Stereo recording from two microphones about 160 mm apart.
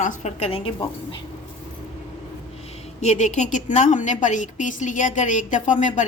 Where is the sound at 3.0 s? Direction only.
45° left (ahead or behind).